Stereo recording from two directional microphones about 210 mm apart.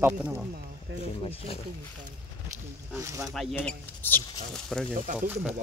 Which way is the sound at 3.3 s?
Centre (ahead or behind).